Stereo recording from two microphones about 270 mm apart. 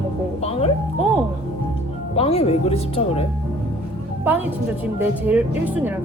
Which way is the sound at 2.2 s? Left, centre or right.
Left.